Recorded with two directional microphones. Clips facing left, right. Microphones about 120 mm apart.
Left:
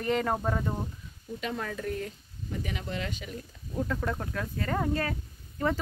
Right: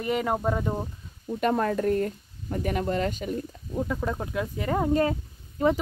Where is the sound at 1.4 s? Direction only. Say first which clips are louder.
Right 10 dB; 50° right (ahead or behind).